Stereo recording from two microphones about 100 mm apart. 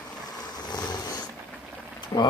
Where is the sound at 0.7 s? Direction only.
45° left (ahead or behind).